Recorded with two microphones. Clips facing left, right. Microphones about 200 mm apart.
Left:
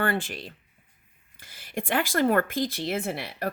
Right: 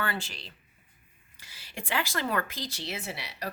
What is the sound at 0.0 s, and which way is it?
A woman's voice, 50° left (ahead or behind).